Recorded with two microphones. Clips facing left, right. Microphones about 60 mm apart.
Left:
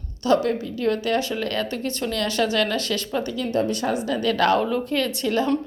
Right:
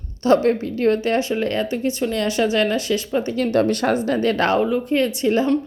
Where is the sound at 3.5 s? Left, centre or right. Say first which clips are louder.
Right 4 dB; right.